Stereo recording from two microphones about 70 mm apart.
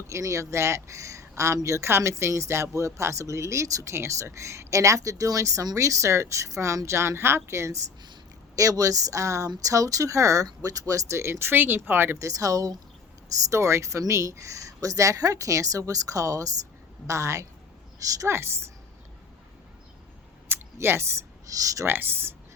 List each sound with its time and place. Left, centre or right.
0.1 s speech: right
12.2 s speech: right
18.3 s speech: right
20.5 s a sound: right
21.6 s speech: right
21.8 s speech: right